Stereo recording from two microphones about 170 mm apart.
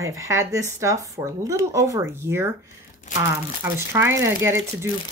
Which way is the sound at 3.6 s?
15° right (ahead or behind).